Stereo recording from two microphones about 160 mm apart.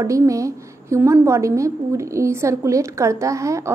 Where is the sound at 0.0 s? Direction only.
20° right (ahead or behind).